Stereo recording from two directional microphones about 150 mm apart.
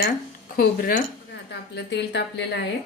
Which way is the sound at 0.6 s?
75° left (ahead or behind).